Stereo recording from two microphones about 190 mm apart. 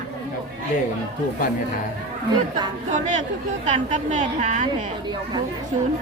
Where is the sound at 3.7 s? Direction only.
40° right (ahead or behind).